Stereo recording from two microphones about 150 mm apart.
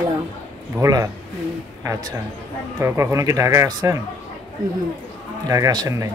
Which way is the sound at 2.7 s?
20° right (ahead or behind).